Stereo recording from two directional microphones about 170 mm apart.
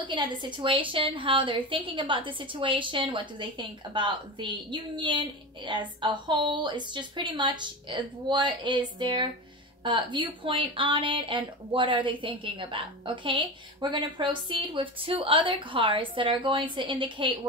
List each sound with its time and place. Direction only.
0.1 s a woman's voice: 30° right (ahead or behind)